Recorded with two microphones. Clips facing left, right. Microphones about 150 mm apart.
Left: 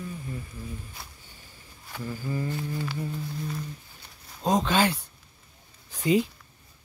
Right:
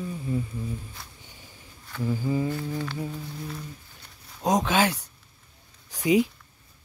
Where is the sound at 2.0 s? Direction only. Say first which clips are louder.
Right 6 dB; 15° right (ahead or behind).